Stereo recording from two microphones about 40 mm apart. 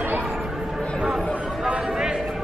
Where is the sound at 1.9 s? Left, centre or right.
Centre.